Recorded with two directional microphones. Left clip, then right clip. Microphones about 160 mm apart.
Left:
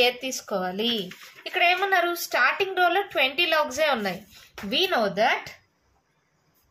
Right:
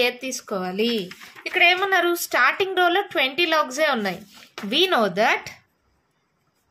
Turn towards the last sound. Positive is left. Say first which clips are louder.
# right 3 dB
turn(degrees=-55)  # may be behind; listen again after turning